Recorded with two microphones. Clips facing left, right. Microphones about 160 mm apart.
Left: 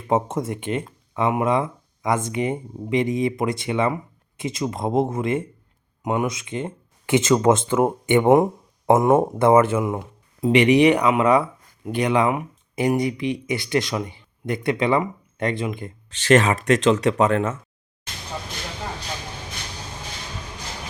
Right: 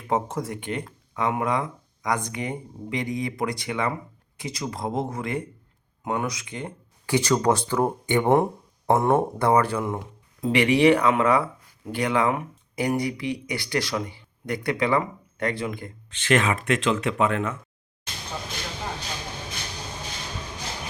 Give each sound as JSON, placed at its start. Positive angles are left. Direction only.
{"t": 0.1, "sound": "speech", "side_deg": 20}
{"t": 16.0, "sound": "speech", "side_deg": 35}